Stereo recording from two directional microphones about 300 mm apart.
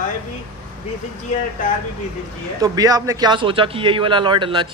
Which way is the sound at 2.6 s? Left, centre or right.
Centre.